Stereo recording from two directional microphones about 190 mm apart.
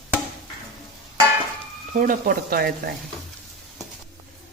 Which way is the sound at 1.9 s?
45° right (ahead or behind).